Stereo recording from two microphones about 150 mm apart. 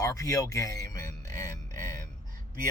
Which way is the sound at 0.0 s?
20° left (ahead or behind).